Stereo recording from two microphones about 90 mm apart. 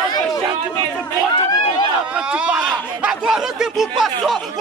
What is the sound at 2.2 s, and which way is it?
Speech, 10° right (ahead or behind).